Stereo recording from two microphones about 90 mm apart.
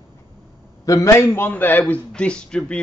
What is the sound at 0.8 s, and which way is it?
A man's voice, 40° left (ahead or behind).